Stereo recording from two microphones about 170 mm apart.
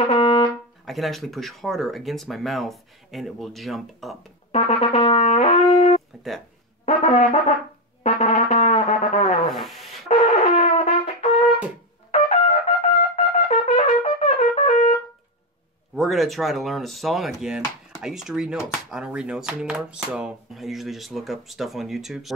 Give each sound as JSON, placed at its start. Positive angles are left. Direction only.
{"t": 0.0, "sound": "brass instrument", "side_deg": 35}
{"t": 0.8, "sound": "speech", "side_deg": 0}
{"t": 4.5, "sound": "brass instrument", "side_deg": 40}
{"t": 9.5, "sound": "music", "side_deg": 0}
{"t": 10.0, "sound": "wind instrument", "side_deg": 40}
{"t": 12.1, "sound": "brass instrument", "side_deg": 35}
{"t": 16.0, "sound": "speech", "side_deg": 0}